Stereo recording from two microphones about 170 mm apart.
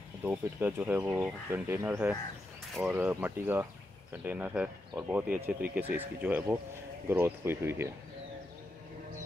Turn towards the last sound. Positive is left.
turn(degrees=-15)  # may be behind; listen again after turning